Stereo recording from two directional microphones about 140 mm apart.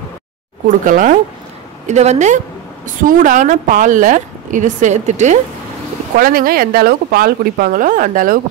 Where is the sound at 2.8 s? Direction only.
70° right (ahead or behind).